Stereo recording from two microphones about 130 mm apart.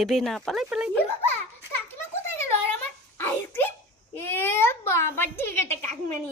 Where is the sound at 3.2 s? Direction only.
15° left (ahead or behind).